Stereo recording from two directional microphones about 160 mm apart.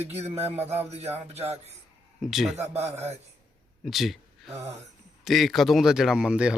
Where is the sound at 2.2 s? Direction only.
Centre (ahead or behind).